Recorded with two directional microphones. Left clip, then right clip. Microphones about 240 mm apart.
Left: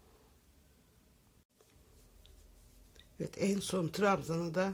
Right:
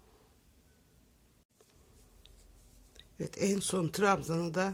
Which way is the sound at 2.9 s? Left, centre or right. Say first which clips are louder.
Right 1 dB; centre.